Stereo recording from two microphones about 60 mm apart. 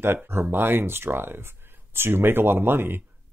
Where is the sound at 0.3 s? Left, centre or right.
Right.